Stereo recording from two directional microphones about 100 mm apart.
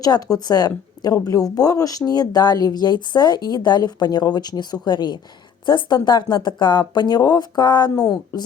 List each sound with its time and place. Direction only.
0.0 s speech: 40° left (ahead or behind)